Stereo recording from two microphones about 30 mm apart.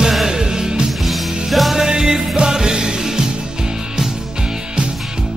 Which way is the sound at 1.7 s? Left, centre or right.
Centre.